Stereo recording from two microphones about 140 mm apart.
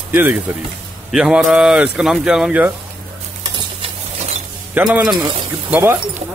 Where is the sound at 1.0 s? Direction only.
5° right (ahead or behind).